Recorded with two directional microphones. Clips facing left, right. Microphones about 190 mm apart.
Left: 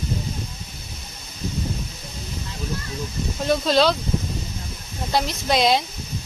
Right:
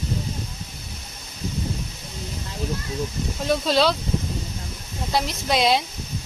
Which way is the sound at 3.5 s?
5° right (ahead or behind).